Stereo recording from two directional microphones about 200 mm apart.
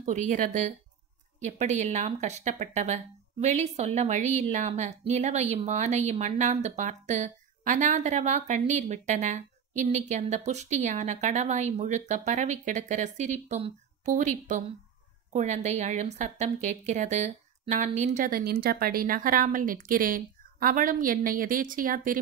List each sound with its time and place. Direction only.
0.0 s a woman's voice: 40° right (ahead or behind)